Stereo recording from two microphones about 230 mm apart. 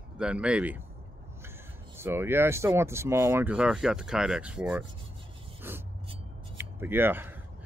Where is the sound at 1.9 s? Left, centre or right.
Centre.